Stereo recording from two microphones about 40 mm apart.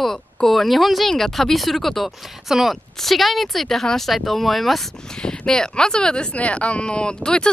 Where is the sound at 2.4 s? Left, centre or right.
Centre.